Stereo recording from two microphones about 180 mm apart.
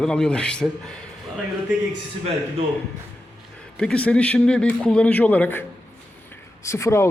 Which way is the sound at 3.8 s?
5° left (ahead or behind).